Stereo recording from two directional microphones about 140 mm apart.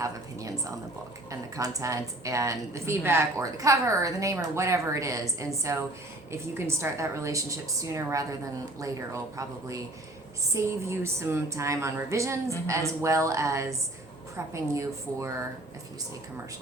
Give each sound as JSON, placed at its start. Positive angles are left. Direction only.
{"t": 0.0, "sound": "a woman's voice", "side_deg": -25}